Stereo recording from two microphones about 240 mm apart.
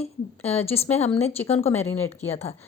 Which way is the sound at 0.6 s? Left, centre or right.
Left.